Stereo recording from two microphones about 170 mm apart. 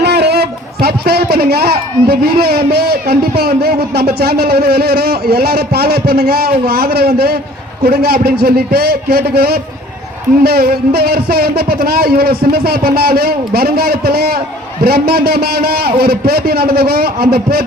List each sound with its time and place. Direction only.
0.0 s a man's voice: 75° right (ahead or behind)